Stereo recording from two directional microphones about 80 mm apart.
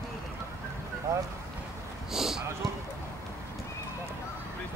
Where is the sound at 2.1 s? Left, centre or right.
Centre.